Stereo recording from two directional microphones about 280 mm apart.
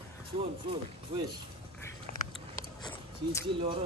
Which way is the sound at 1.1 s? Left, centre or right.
Centre.